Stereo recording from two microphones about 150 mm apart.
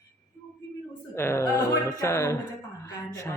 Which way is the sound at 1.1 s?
15° left (ahead or behind).